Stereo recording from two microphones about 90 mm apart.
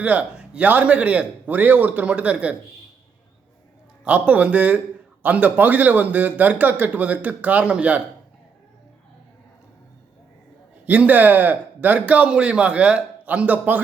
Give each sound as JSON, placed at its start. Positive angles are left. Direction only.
{"t": 0.0, "sound": "a man's voice", "side_deg": -15}
{"t": 4.0, "sound": "a man's voice", "side_deg": -15}
{"t": 10.8, "sound": "a man's voice", "side_deg": -15}